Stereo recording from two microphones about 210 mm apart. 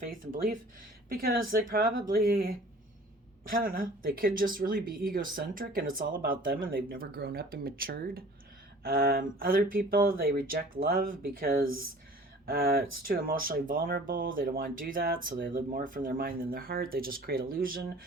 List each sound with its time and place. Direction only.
0.0 s speech: 40° right (ahead or behind)
3.5 s speech: 40° right (ahead or behind)